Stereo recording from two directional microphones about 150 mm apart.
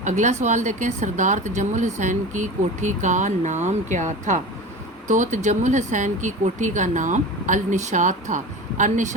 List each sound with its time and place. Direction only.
0.0 s speech: 50° right (ahead or behind)